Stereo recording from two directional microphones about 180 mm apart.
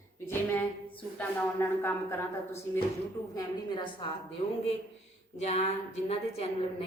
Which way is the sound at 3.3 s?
25° left (ahead or behind).